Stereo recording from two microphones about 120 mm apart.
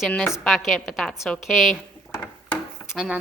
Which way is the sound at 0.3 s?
Centre (ahead or behind).